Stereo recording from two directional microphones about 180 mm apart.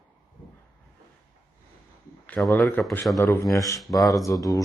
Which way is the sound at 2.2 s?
10° left (ahead or behind).